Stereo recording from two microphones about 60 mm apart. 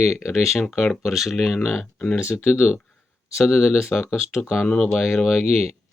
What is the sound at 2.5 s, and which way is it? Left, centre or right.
Speech, left.